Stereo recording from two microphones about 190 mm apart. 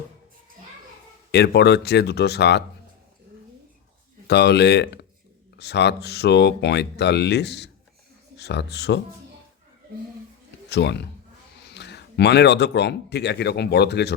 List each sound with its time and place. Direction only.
1.3 s speech: 60° left (ahead or behind)
4.3 s speech: 60° left (ahead or behind)
10.7 s speech: 65° left (ahead or behind)